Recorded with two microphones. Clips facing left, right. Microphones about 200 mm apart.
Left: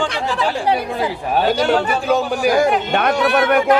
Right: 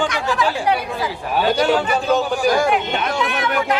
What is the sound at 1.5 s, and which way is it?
A man's voice, centre (ahead or behind).